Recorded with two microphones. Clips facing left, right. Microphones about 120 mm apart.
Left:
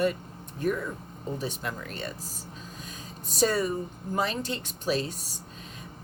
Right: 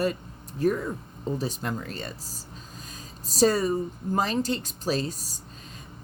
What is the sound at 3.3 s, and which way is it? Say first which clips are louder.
A woman's voice: right 4 dB; 35° right (ahead or behind).